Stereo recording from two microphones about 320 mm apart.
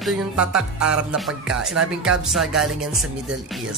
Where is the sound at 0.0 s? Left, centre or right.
Centre.